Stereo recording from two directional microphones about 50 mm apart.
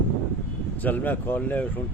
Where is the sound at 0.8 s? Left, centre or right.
Left.